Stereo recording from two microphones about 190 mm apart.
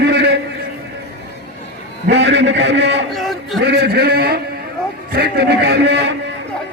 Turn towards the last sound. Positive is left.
turn(degrees=-65)  # may be behind; listen again after turning